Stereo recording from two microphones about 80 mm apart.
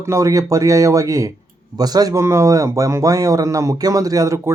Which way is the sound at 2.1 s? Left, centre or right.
Right.